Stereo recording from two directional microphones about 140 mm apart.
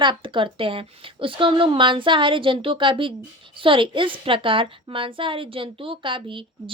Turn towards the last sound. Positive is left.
turn(degrees=-35)  # may be behind; listen again after turning